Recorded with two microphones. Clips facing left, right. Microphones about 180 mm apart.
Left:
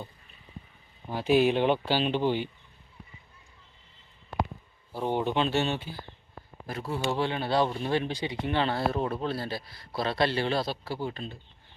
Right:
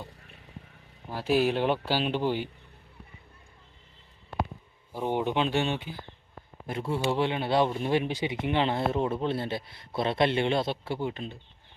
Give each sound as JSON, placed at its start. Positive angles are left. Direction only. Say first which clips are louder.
{"t": 0.0, "sound": "vehicle", "louder": "left 1 dB", "side_deg": -80}
{"t": 1.1, "sound": "speech", "louder": "left 2 dB", "side_deg": -5}
{"t": 4.9, "sound": "speech", "louder": "even", "side_deg": -15}
{"t": 6.7, "sound": "a man's voice", "louder": "right 2 dB", "side_deg": -25}